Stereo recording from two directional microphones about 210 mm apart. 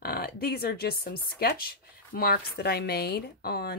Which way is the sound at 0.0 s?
50° left (ahead or behind).